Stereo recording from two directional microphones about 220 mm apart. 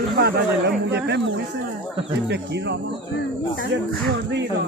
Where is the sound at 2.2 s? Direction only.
50° right (ahead or behind).